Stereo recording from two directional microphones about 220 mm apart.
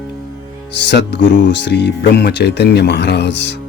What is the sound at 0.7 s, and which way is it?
Speech, 50° left (ahead or behind).